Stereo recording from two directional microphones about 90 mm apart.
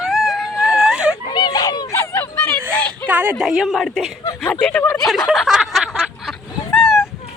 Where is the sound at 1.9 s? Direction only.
30° left (ahead or behind).